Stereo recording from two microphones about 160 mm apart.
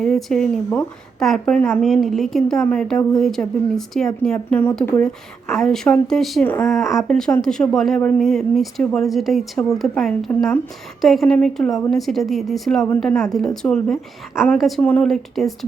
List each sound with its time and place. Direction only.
0.0 s a woman's voice: centre (ahead or behind)